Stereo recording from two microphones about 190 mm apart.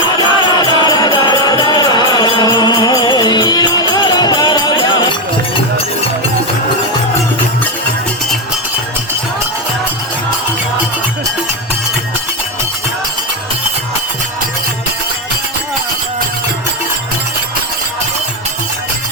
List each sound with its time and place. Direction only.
0.2 s music: 20° left (ahead or behind)